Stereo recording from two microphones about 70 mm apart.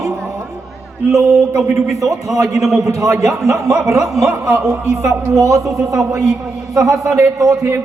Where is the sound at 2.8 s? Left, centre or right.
Right.